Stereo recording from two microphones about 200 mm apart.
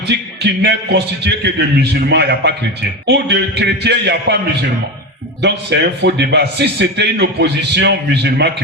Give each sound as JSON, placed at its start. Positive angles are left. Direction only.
{"t": 0.4, "sound": "a man's voice", "side_deg": -55}
{"t": 5.4, "sound": "a man's voice", "side_deg": -60}